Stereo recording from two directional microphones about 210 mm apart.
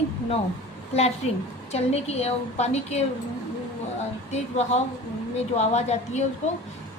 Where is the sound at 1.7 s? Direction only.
30° left (ahead or behind).